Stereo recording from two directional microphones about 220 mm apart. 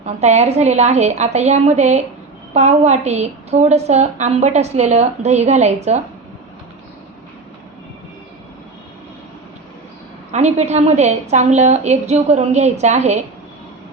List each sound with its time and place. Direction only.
0.0 s a woman's voice: 30° right (ahead or behind)
10.3 s a woman's voice: 30° right (ahead or behind)